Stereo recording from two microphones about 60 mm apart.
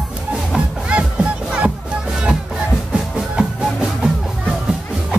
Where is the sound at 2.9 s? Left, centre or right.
Centre.